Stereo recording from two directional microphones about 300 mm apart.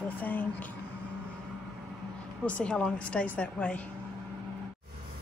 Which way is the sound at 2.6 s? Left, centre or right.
Centre.